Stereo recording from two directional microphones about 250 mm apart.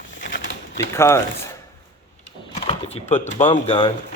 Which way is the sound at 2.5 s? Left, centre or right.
Left.